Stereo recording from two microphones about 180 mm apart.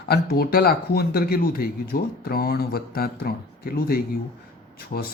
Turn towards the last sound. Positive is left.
turn(degrees=50)  # may be behind; listen again after turning